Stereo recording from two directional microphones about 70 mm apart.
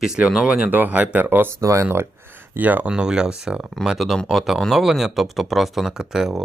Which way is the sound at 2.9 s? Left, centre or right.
Centre.